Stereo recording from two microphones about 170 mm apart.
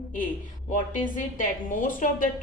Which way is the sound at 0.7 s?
50° left (ahead or behind).